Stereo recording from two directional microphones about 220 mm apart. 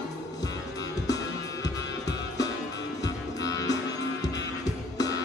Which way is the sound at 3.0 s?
15° left (ahead or behind).